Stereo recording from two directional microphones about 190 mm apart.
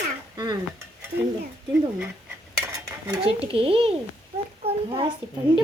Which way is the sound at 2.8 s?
25° right (ahead or behind).